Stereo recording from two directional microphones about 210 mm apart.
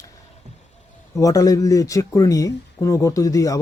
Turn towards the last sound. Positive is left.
turn(degrees=15)  # may be behind; listen again after turning